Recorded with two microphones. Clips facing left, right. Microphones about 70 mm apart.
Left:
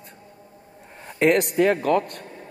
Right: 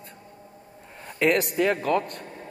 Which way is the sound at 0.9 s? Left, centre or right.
Left.